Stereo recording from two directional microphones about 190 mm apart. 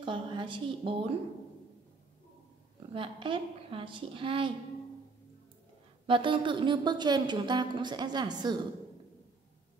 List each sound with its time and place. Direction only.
0.0 s a woman's voice: 25° right (ahead or behind)
2.9 s speech: 25° right (ahead or behind)
6.0 s speech: 25° right (ahead or behind)